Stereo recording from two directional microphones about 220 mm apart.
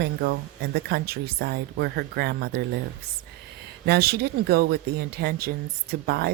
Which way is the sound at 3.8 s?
45° right (ahead or behind).